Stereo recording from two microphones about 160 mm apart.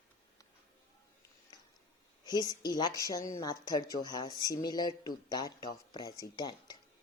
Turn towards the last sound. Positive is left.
turn(degrees=25)  # may be behind; listen again after turning